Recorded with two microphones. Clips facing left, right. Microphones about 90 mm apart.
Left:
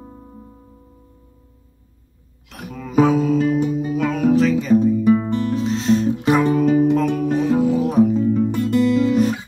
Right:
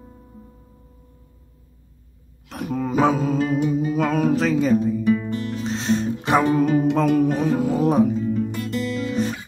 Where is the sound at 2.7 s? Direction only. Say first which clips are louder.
Left 3 dB; 40° right (ahead or behind).